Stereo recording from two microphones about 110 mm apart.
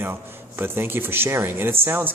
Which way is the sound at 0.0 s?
20° right (ahead or behind).